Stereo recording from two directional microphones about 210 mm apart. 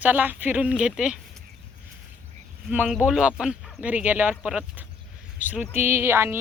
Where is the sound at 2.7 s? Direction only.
5° right (ahead or behind).